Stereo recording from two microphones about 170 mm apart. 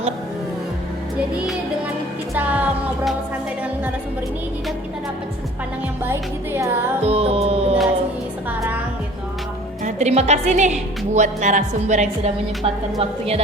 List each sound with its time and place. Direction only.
2.3 s music: 10° right (ahead or behind)
6.1 s music: 15° right (ahead or behind)
7.0 s music: 35° right (ahead or behind)
9.8 s a woman's voice: 40° right (ahead or behind)